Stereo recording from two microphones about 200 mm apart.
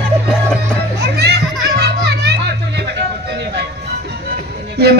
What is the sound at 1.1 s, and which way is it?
Music, 55° right (ahead or behind).